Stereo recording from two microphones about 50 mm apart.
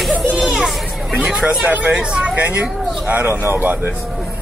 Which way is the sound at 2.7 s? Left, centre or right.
Centre.